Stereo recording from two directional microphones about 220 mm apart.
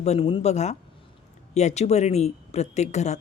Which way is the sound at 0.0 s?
30° left (ahead or behind).